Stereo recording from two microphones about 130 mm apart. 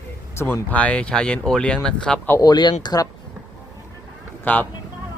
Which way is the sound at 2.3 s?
30° left (ahead or behind).